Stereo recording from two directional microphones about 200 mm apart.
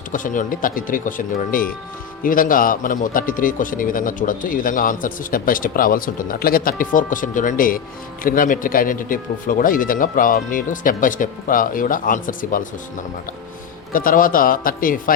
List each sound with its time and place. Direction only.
0.1 s speech: 40° left (ahead or behind)
13.9 s speech: 45° left (ahead or behind)